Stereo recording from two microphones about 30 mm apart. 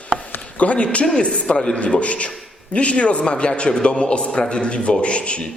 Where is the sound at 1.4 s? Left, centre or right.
Left.